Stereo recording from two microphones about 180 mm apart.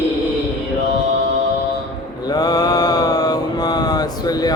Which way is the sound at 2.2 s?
20° left (ahead or behind).